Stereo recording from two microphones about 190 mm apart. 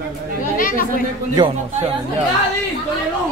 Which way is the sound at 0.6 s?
45° left (ahead or behind).